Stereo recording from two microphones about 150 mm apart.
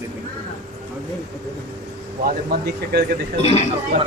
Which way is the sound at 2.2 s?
90° right.